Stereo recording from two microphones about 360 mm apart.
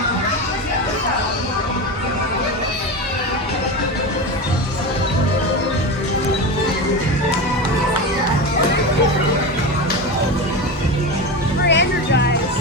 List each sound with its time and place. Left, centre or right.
11.7 s music: left